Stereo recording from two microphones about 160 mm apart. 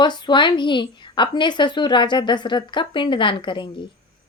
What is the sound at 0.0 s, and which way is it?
A woman's voice, 25° left (ahead or behind).